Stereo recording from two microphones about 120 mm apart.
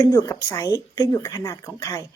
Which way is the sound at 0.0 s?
25° left (ahead or behind).